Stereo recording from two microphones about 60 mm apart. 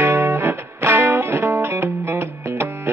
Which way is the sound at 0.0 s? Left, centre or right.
Right.